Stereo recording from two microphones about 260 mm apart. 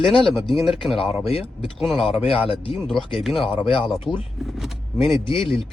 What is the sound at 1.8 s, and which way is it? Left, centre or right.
Speech, centre.